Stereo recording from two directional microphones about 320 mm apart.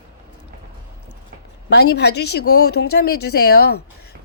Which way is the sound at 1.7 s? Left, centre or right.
Left.